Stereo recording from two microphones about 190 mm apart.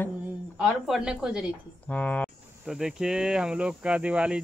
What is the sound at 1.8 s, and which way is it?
Speech, 10° left (ahead or behind).